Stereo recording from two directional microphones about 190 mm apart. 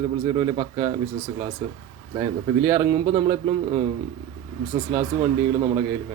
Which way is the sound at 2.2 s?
15° right (ahead or behind).